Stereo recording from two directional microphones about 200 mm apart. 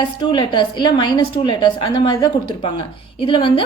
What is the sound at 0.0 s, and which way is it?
A woman's voice, 20° left (ahead or behind).